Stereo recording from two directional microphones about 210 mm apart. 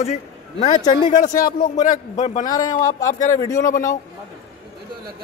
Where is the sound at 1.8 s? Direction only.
35° left (ahead or behind).